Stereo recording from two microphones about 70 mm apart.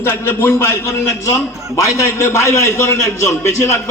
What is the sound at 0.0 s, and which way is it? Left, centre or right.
A man's voice, left.